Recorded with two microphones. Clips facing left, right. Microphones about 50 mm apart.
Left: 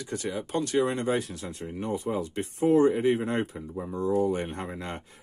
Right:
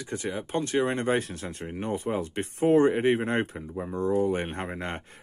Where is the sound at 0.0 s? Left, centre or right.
Right.